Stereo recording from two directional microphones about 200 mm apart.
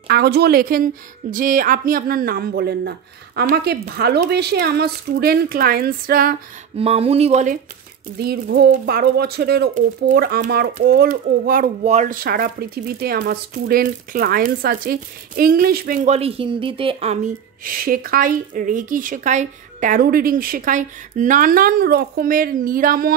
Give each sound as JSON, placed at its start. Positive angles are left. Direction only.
{"t": 0.1, "sound": "a child's voice", "side_deg": -55}
{"t": 6.8, "sound": "speech", "side_deg": -30}
{"t": 8.2, "sound": "a child's voice", "side_deg": -50}